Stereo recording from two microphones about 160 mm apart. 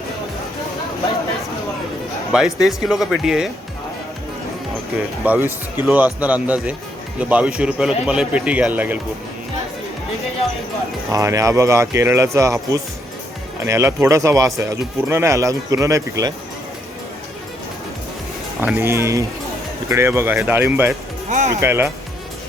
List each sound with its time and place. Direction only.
2.3 s speech: 5° right (ahead or behind)
5.2 s speech: 10° right (ahead or behind)
11.1 s speech: 20° right (ahead or behind)
13.7 s speech: 20° right (ahead or behind)
18.6 s speech: 15° right (ahead or behind)
21.2 s speech: 45° right (ahead or behind)
21.5 s speech: 15° right (ahead or behind)